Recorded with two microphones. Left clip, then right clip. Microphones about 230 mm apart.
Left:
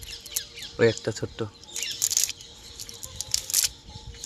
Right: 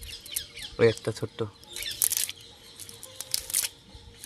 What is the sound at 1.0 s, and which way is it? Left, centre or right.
Speech, centre.